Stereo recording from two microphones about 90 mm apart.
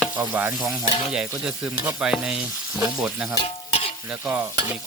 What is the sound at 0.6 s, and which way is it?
Stir, 5° right (ahead or behind).